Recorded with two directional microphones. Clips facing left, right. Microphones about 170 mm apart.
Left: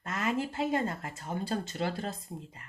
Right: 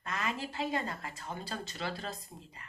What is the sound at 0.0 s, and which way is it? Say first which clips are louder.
Speech: left 5 dB; 50° left (ahead or behind).